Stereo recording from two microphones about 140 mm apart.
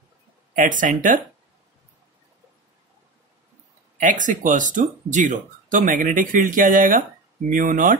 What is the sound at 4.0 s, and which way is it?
Speech, 65° right (ahead or behind).